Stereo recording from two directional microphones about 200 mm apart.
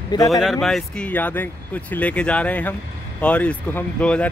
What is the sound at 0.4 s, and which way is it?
Speech, centre (ahead or behind).